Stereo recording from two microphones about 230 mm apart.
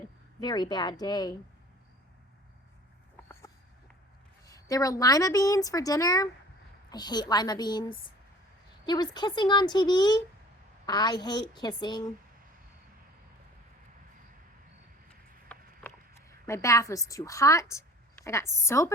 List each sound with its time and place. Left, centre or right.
0.3 s speech: centre
4.4 s a woman's voice: centre
15.4 s a sound: centre